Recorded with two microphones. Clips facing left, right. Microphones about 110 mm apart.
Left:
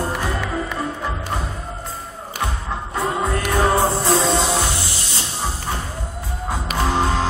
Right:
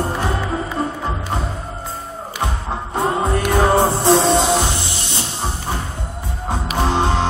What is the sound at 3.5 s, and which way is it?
Music, 25° right (ahead or behind).